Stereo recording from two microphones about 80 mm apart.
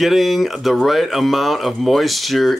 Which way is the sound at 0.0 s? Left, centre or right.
Centre.